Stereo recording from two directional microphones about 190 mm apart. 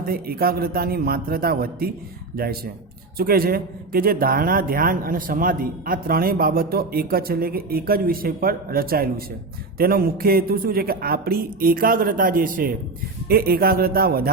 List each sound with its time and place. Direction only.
0.0 s a man's voice: 50° right (ahead or behind)